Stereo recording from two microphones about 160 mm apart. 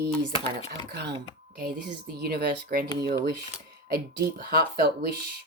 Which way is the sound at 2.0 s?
75° right (ahead or behind).